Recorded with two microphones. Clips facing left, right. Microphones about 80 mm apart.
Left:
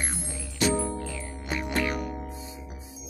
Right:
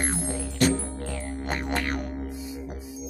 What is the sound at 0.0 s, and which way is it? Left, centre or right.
Music, right.